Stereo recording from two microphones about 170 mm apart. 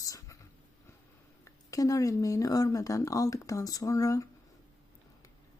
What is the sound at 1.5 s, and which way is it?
Speech, 20° left (ahead or behind).